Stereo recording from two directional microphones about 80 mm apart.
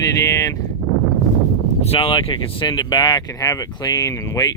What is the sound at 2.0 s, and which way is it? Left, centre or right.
Speech, left.